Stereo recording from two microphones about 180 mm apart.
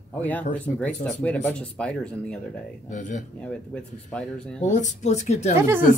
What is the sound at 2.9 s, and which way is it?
Speech, 45° left (ahead or behind).